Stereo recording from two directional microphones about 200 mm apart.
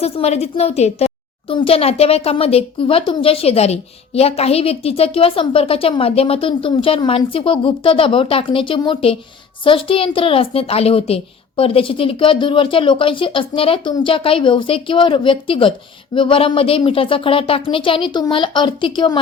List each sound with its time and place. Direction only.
0.0 s a woman's voice: 30° left (ahead or behind)